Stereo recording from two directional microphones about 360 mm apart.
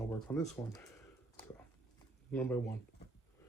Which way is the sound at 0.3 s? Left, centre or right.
Centre.